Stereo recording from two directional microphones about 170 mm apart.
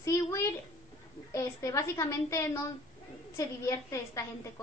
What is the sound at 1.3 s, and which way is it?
A woman's voice, 15° left (ahead or behind).